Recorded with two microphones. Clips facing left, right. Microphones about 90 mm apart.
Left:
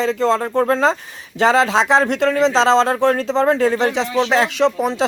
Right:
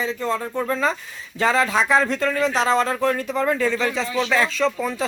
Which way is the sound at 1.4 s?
85° left.